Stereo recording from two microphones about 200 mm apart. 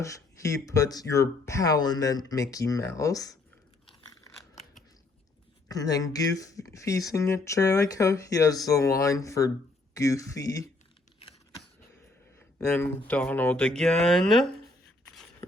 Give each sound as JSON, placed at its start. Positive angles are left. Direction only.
{"t": 0.6, "sound": "speech", "side_deg": 15}
{"t": 3.8, "sound": "crunch", "side_deg": 20}
{"t": 5.6, "sound": "speech", "side_deg": 20}
{"t": 12.4, "sound": "speech", "side_deg": 10}